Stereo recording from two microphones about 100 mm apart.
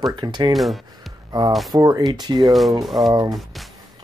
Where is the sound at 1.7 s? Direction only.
40° right (ahead or behind).